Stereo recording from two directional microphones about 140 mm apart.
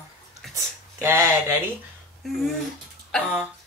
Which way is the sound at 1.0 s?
20° right (ahead or behind).